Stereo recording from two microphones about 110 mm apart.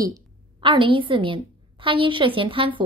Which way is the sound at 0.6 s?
50° right (ahead or behind).